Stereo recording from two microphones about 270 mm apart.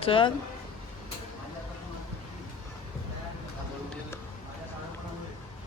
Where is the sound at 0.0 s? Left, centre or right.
Centre.